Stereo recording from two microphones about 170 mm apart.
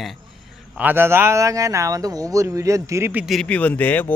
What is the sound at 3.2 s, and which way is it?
Speech, 5° left (ahead or behind).